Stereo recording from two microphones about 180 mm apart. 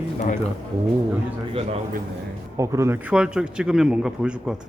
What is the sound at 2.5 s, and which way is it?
A man's voice, 15° right (ahead or behind).